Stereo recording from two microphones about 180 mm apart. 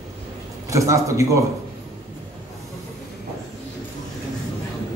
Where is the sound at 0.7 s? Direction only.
15° right (ahead or behind).